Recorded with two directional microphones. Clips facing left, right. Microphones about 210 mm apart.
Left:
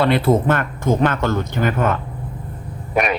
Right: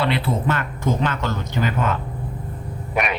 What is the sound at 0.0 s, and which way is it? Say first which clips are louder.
Speech: left 6 dB; 45° left (ahead or behind).